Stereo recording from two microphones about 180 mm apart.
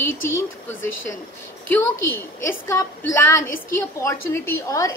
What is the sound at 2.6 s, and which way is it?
A woman's voice, 15° left (ahead or behind).